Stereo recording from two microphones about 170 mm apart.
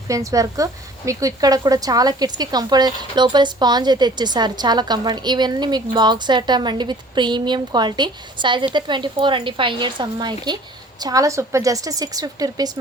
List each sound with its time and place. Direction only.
0.1 s a woman's voice: 20° right (ahead or behind)